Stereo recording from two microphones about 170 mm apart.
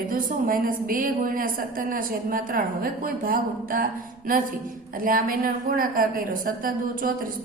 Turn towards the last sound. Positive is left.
turn(degrees=-55)  # may be behind; listen again after turning